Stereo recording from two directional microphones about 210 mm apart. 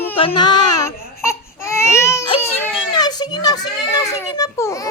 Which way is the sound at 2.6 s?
20° left (ahead or behind).